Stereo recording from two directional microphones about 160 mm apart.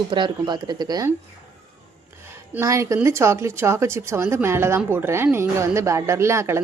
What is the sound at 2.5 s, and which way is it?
A woman's voice, 15° right (ahead or behind).